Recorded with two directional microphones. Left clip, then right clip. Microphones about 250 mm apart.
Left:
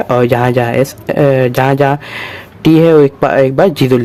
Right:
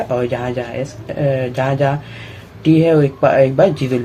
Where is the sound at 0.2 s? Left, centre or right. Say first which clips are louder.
Left 9 dB; left.